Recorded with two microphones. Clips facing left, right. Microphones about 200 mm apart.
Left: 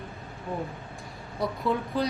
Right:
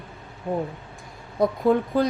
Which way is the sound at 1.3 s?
50° right (ahead or behind).